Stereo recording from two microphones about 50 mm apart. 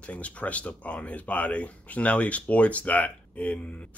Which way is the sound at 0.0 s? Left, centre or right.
Left.